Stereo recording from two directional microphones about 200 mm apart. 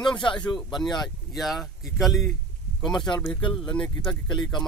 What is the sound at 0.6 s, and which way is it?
Speech, 20° left (ahead or behind).